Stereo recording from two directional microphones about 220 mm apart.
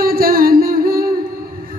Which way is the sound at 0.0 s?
40° right (ahead or behind).